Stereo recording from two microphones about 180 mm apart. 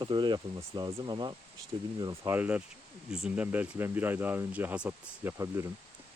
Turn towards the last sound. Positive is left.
turn(degrees=-15)  # may be behind; listen again after turning